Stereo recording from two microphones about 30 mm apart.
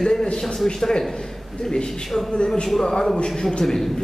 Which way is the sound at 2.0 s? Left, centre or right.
Centre.